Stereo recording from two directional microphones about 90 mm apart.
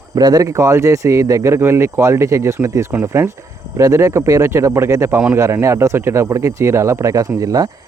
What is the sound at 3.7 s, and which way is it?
Speech, 35° right (ahead or behind).